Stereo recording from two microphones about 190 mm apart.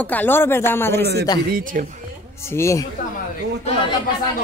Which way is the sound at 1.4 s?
45° right (ahead or behind).